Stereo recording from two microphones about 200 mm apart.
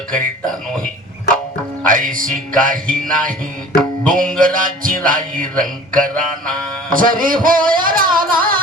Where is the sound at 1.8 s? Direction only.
45° right (ahead or behind).